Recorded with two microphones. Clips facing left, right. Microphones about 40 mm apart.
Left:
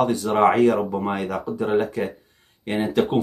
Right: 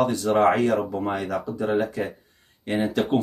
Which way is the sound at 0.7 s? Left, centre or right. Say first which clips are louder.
Left 1 dB; left.